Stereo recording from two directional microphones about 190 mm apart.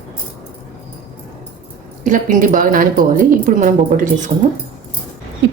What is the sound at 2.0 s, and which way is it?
Speech, 45° right (ahead or behind).